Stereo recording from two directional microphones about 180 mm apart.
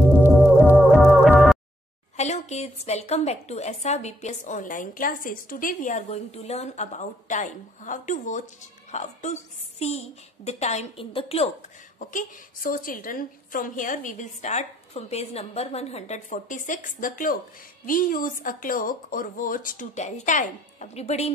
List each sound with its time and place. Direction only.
0.2 s music: 10° right (ahead or behind)
2.1 s a woman's voice: 40° left (ahead or behind)
12.0 s a woman's voice: 45° left (ahead or behind)